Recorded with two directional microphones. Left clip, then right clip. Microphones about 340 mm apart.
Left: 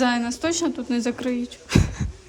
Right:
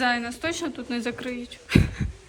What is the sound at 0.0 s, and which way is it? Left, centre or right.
Speech, centre.